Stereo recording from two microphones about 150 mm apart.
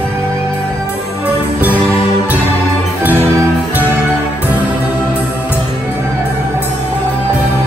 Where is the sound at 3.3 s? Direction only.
20° right (ahead or behind).